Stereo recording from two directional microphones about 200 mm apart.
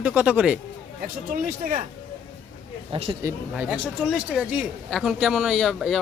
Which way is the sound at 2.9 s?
25° right (ahead or behind).